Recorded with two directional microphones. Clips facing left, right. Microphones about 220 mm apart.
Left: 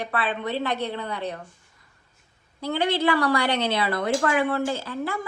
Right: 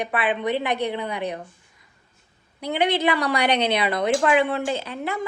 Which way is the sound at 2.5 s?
15° right (ahead or behind).